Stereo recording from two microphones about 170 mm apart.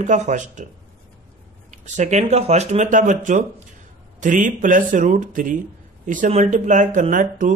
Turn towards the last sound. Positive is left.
turn(degrees=-50)  # may be behind; listen again after turning